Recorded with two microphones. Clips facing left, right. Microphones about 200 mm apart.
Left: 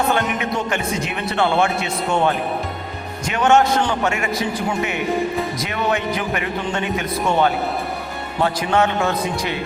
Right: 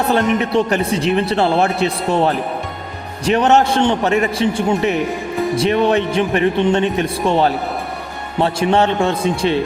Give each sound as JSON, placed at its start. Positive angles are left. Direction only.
{"t": 0.1, "sound": "a man's voice", "side_deg": -35}